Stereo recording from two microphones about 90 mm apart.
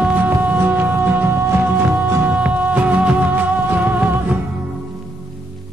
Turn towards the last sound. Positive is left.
turn(degrees=-20)  # may be behind; listen again after turning